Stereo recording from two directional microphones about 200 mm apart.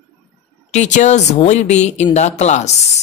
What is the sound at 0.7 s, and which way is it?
Speech, 35° left (ahead or behind).